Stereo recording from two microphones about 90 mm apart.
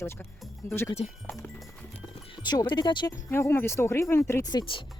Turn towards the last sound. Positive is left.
turn(degrees=50)  # may be behind; listen again after turning